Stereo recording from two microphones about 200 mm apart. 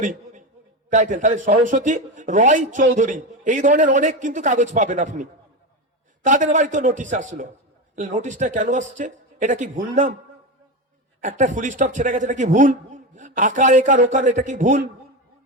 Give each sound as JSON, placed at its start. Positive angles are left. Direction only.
{"t": 0.0, "sound": "a sound", "side_deg": -40}
{"t": 0.9, "sound": "a man's voice", "side_deg": -40}
{"t": 11.2, "sound": "a man's voice", "side_deg": -40}